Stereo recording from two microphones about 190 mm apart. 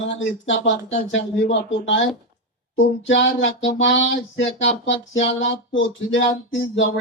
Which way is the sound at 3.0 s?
75° left (ahead or behind).